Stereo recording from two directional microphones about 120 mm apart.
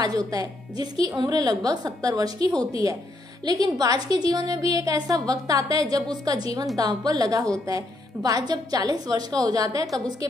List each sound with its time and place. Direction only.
0.0 s a woman's voice: 30° right (ahead or behind)